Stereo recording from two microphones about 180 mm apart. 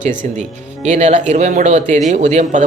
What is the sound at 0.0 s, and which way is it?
Speech, 45° right (ahead or behind).